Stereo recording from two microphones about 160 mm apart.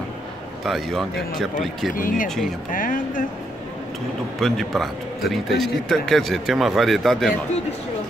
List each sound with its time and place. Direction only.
0.7 s speech: centre (ahead or behind)
2.0 s speech: 60° left (ahead or behind)
2.2 s speech: 5° left (ahead or behind)
2.7 s speech: 55° left (ahead or behind)
4.4 s speech: centre (ahead or behind)